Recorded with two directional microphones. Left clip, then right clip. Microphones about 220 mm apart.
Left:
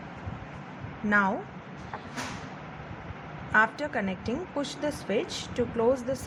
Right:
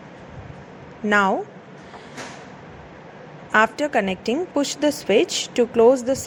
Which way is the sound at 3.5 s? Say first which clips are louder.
Right 7 dB; 30° right (ahead or behind).